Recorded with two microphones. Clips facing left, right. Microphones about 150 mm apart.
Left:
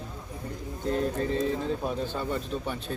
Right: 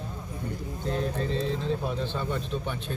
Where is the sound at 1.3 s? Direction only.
50° left (ahead or behind).